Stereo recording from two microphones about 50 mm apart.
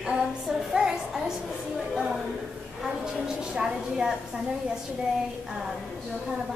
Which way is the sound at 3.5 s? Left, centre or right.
Centre.